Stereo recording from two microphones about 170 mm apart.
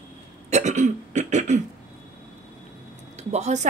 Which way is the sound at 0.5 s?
45° right (ahead or behind).